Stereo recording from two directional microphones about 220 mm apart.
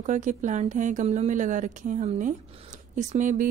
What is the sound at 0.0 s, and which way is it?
Speech, 35° right (ahead or behind).